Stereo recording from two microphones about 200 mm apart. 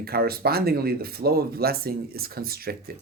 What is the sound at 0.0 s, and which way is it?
Speech, 50° right (ahead or behind).